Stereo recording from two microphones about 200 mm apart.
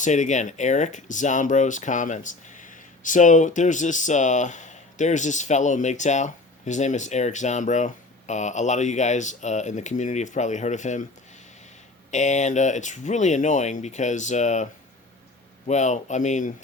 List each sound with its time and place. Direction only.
0.0 s speech: 40° left (ahead or behind)
12.1 s speech: 35° left (ahead or behind)